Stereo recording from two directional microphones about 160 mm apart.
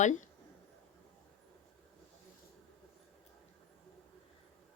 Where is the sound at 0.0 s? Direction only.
50° left (ahead or behind).